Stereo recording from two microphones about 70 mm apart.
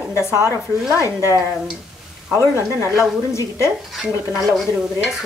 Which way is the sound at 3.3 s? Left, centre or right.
Left.